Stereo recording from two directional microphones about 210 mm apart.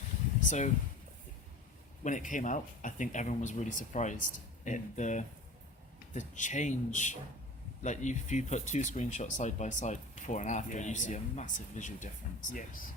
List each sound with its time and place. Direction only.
0.4 s speech: 35° left (ahead or behind)
2.0 s speech: 35° left (ahead or behind)